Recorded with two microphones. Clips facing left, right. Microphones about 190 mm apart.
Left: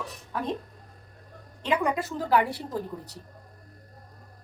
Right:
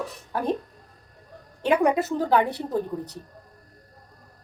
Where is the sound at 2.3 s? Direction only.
20° right (ahead or behind).